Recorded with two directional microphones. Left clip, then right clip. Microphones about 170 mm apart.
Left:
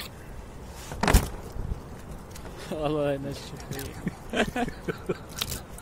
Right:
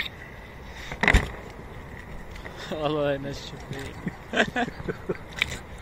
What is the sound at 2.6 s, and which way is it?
A man's voice, 5° left (ahead or behind).